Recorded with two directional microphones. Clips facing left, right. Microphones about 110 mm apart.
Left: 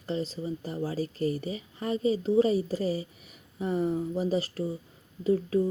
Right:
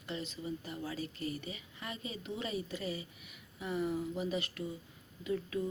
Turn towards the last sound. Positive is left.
turn(degrees=35)  # may be behind; listen again after turning